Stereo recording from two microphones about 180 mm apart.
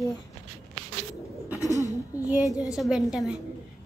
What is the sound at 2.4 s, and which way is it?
Speech, 20° left (ahead or behind).